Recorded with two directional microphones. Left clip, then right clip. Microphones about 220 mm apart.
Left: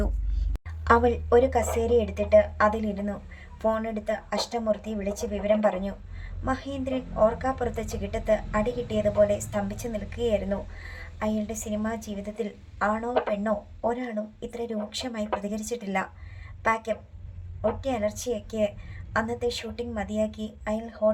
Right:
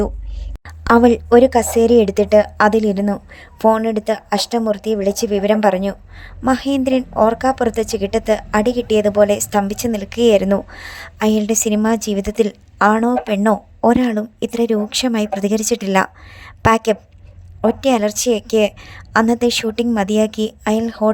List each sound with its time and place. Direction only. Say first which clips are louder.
0.9 s speech: right 9 dB; 40° right (ahead or behind)